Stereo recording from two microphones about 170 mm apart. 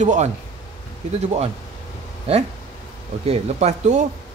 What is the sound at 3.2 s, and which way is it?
Speech, 40° right (ahead or behind).